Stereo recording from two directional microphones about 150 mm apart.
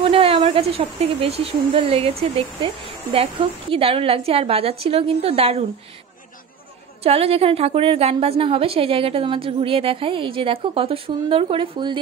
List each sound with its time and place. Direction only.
0.0 s a woman's voice: 40° right (ahead or behind)
7.0 s a woman's voice: 40° right (ahead or behind)